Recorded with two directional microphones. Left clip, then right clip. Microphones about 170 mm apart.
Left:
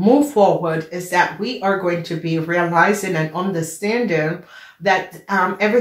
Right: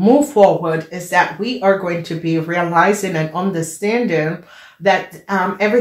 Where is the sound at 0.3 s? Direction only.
40° right (ahead or behind).